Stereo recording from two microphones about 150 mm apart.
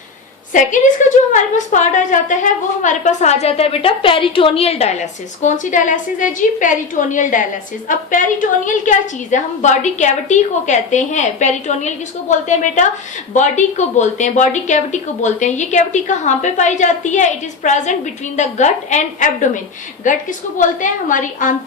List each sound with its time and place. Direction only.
0.5 s a woman's voice: 55° left (ahead or behind)